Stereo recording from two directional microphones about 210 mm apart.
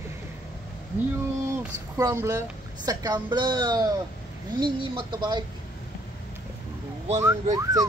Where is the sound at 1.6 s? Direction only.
15° right (ahead or behind).